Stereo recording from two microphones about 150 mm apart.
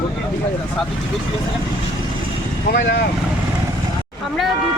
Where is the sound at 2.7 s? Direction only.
65° left (ahead or behind).